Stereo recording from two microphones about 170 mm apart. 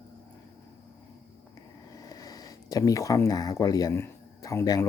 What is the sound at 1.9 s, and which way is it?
Speech, 20° left (ahead or behind).